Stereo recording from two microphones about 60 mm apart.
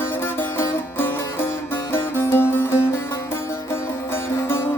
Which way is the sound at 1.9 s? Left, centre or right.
Left.